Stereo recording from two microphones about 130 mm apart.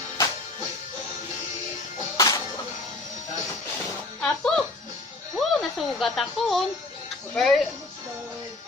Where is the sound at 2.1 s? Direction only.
25° left (ahead or behind).